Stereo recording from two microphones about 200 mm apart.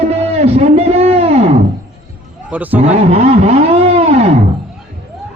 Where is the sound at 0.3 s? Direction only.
30° right (ahead or behind).